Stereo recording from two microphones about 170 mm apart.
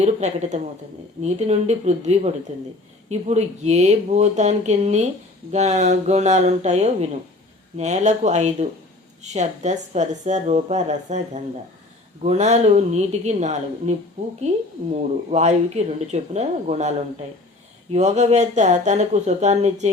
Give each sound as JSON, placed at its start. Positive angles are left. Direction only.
{"t": 0.0, "sound": "a woman's voice", "side_deg": -40}
{"t": 15.3, "sound": "speech", "side_deg": -40}
{"t": 17.9, "sound": "a woman's voice", "side_deg": -40}